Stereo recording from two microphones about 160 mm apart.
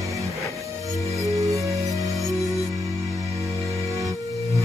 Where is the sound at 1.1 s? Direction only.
20° right (ahead or behind).